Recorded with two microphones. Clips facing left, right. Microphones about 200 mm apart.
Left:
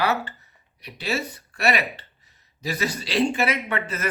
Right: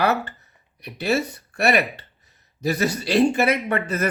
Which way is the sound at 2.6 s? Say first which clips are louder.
Right 5 dB; 50° right (ahead or behind).